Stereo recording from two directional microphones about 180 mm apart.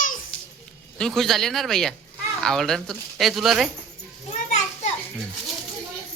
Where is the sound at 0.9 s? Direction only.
Centre (ahead or behind).